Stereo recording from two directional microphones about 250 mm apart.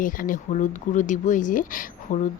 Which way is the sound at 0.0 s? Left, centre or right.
Left.